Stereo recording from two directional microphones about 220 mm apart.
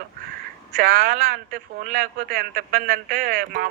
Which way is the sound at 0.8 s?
40° right (ahead or behind).